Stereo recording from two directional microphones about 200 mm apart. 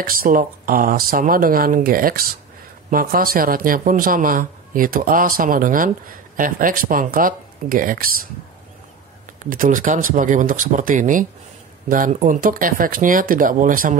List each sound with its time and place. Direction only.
0.0 s speech: 45° right (ahead or behind)
9.4 s speech: 40° right (ahead or behind)